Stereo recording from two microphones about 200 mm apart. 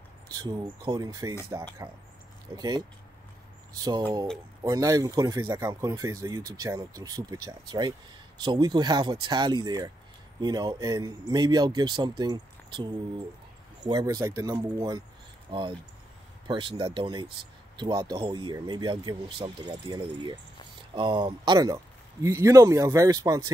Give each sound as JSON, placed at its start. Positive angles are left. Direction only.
{"t": 0.3, "sound": "speech", "side_deg": -20}